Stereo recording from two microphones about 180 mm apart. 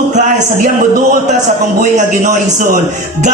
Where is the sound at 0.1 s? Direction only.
45° right (ahead or behind).